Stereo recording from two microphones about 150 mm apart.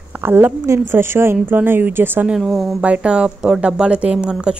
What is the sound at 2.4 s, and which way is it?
Speech, centre (ahead or behind).